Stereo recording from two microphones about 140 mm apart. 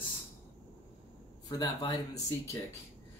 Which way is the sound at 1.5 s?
25° left (ahead or behind).